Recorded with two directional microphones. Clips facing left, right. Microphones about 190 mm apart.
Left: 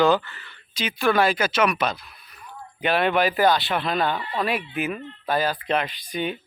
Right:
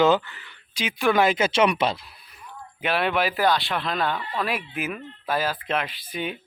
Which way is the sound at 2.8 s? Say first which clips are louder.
Left 3 dB; centre (ahead or behind).